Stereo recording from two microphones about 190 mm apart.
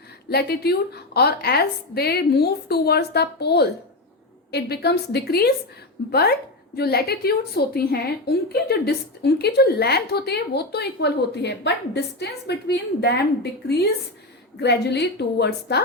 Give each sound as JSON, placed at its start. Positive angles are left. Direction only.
{"t": 0.3, "sound": "a woman's voice", "side_deg": 55}